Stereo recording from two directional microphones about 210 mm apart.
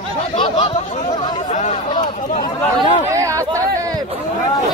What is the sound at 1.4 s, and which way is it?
Chatter, 35° left (ahead or behind).